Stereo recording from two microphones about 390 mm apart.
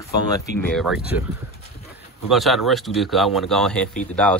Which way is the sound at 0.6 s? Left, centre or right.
Centre.